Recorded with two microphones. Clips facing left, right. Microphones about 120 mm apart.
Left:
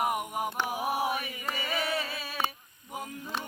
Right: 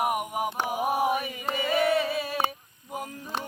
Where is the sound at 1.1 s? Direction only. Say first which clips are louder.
Right 5 dB; 20° right (ahead or behind).